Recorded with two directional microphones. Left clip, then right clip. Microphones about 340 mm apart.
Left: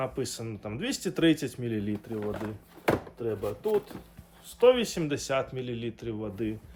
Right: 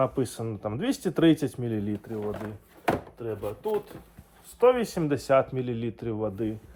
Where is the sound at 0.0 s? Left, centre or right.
Centre.